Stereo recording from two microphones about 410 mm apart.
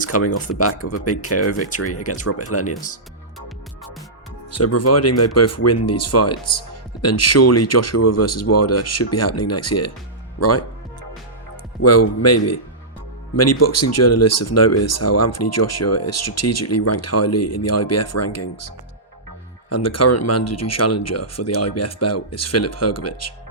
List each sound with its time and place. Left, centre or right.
0.0 s speech: left
4.5 s speech: left
11.8 s speech: left
19.7 s speech: left